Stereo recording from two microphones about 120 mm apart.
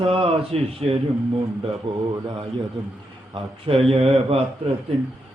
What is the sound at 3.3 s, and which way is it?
Speech, 50° right (ahead or behind).